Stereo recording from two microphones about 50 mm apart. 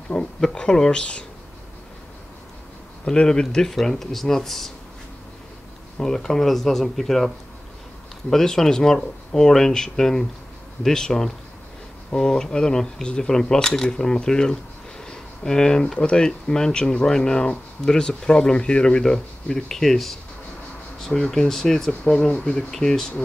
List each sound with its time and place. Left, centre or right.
0.1 s speech: centre
3.1 s speech: centre
5.9 s speech: centre
19.8 s speech: centre